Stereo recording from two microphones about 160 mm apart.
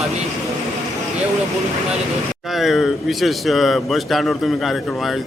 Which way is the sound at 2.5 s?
Centre (ahead or behind).